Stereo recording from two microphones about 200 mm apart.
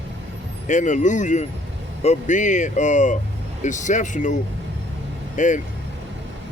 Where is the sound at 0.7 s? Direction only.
40° left (ahead or behind).